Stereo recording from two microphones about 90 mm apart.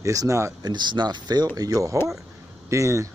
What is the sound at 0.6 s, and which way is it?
Speech, 55° right (ahead or behind).